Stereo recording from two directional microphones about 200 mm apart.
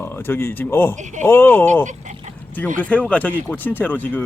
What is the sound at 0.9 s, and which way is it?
Speech, 35° right (ahead or behind).